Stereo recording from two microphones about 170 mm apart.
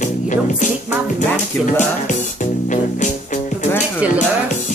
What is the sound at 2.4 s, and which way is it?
Music, 45° left (ahead or behind).